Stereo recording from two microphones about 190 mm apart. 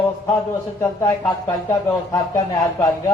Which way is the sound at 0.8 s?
10° left (ahead or behind).